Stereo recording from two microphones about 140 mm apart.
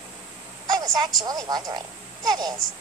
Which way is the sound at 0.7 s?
30° right (ahead or behind).